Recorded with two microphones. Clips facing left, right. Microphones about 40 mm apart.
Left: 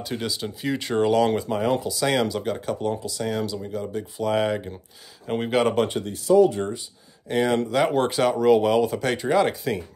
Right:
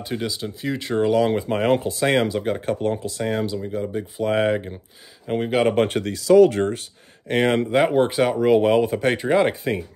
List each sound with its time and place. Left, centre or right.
0.1 s speech: centre
1.5 s speech: right
2.0 s speech: right
5.2 s speech: centre
6.0 s speech: right
7.2 s speech: right
7.5 s speech: right
7.9 s speech: centre